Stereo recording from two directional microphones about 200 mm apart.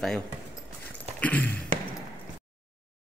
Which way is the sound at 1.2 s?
10° left (ahead or behind).